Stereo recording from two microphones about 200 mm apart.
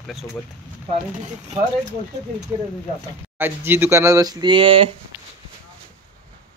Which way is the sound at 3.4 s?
10° right (ahead or behind).